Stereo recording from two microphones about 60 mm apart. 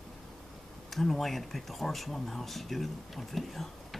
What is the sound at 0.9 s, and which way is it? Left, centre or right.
Speech, centre.